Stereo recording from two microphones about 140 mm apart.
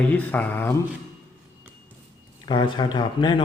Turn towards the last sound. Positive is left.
turn(degrees=35)  # may be behind; listen again after turning